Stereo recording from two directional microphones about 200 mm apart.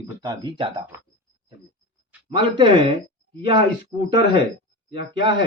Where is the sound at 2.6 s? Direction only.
25° right (ahead or behind).